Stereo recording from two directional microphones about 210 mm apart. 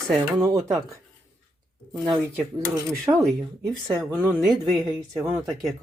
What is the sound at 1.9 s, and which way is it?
Speech, centre (ahead or behind).